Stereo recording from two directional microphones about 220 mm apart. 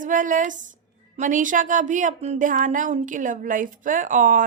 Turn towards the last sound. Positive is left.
turn(degrees=-35)  # may be behind; listen again after turning